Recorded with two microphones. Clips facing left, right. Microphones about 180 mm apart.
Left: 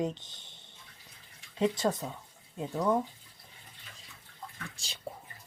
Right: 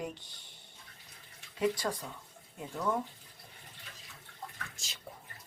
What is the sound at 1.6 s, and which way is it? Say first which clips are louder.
Speech: left 3 dB; 25° left (ahead or behind).